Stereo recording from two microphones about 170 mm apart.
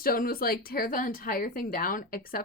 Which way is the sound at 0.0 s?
60° left (ahead or behind).